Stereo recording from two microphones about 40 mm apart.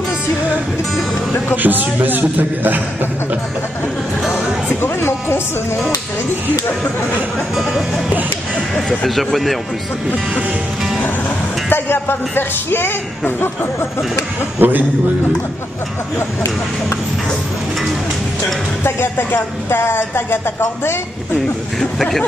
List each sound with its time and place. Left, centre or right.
1.6 s a man's voice: right
4.8 s speech: left
8.7 s speech: centre
11.0 s music: left
11.7 s speech: left
14.6 s a man's voice: right
18.9 s speech: left
19.3 s speech: left
21.7 s speech: centre